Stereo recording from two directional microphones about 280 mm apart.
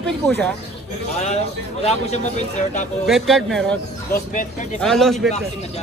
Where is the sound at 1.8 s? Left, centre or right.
Left.